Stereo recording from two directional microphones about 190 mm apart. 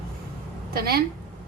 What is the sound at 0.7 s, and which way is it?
Speech, 55° right (ahead or behind).